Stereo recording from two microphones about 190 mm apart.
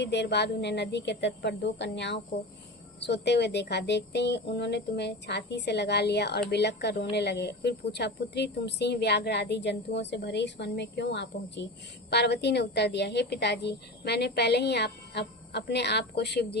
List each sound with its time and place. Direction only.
0.0 s speech: 65° left (ahead or behind)